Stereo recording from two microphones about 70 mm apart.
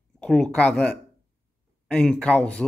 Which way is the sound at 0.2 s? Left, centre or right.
Centre.